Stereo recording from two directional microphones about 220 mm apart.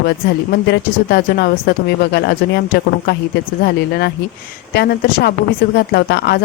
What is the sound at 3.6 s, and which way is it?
A woman's voice, 50° left (ahead or behind).